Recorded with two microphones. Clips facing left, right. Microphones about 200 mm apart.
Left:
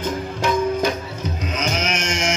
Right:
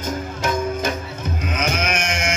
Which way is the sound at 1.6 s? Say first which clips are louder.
Even; 55° right (ahead or behind).